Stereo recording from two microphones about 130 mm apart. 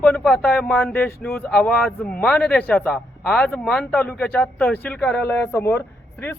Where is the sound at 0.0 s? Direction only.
10° left (ahead or behind).